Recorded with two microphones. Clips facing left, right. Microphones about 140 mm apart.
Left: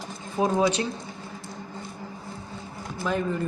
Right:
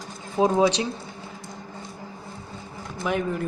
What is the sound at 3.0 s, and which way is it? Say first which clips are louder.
Speech: right 1 dB; 15° right (ahead or behind).